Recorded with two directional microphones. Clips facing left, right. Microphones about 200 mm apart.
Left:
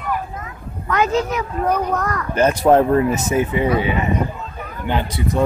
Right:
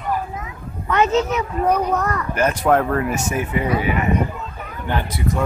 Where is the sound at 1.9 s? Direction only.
10° right (ahead or behind).